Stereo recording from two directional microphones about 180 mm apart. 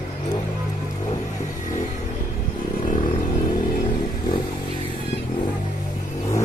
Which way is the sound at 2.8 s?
45° left (ahead or behind).